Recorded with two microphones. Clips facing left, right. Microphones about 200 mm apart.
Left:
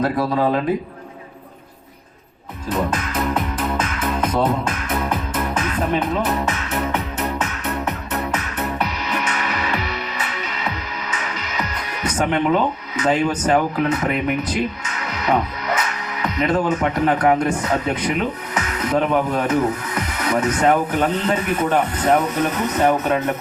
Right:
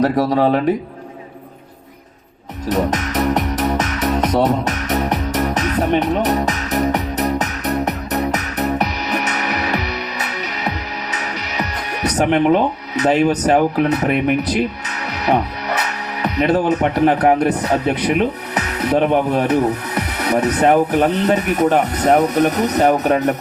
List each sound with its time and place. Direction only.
0.0 s speech: 40° right (ahead or behind)
2.7 s music: 40° right (ahead or behind)
13.4 s speech: 40° right (ahead or behind)
14.3 s speech: 70° right (ahead or behind)
14.8 s music: 35° right (ahead or behind)
15.8 s speech: 35° right (ahead or behind)
18.9 s speech: 25° right (ahead or behind)
19.3 s speech: 35° right (ahead or behind)
20.1 s music: 35° right (ahead or behind)
21.2 s speech: 40° right (ahead or behind)